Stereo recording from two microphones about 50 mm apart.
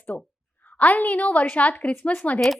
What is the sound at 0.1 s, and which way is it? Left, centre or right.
A woman's voice, left.